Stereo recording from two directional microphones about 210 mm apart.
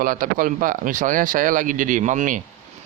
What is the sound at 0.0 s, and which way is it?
Speech, 40° right (ahead or behind).